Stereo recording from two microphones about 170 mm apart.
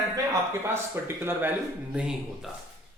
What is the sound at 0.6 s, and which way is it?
A man's voice, 15° right (ahead or behind).